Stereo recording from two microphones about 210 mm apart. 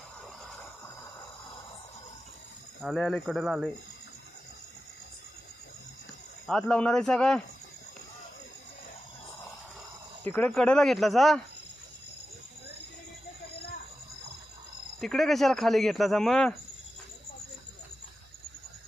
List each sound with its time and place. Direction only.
2.8 s speech: centre (ahead or behind)
6.5 s speech: 5° left (ahead or behind)
10.2 s speech: 5° left (ahead or behind)
15.0 s speech: centre (ahead or behind)